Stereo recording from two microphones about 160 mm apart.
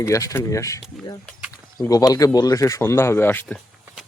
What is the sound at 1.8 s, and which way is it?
Speech, 20° left (ahead or behind).